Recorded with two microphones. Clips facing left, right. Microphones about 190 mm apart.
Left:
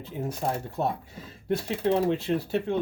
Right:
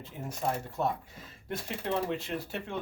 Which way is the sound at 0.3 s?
35° left (ahead or behind).